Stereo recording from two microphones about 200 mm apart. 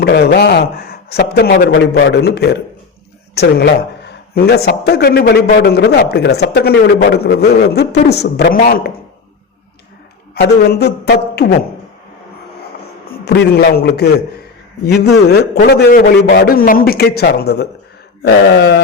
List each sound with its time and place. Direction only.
0.0 s a man's voice: 55° left (ahead or behind)
1.7 s a man's voice: 65° left (ahead or behind)
10.4 s a man's voice: 55° left (ahead or behind)
13.2 s a man's voice: 55° left (ahead or behind)